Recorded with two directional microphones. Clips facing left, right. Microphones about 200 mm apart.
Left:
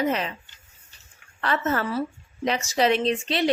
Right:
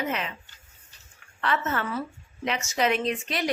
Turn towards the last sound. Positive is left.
turn(degrees=30)  # may be behind; listen again after turning